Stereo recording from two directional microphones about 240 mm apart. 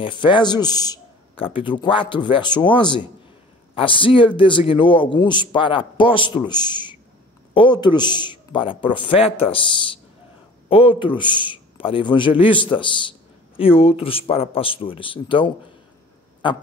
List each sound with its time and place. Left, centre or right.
0.0 s a man's voice: centre